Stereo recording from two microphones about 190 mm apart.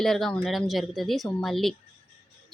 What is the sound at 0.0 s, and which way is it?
Speech, centre (ahead or behind).